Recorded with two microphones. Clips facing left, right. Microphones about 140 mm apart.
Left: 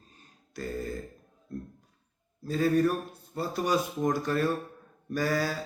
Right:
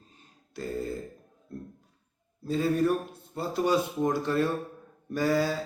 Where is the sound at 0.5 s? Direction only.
25° right (ahead or behind).